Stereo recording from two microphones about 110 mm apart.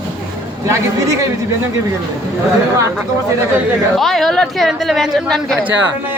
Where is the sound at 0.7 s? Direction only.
30° right (ahead or behind).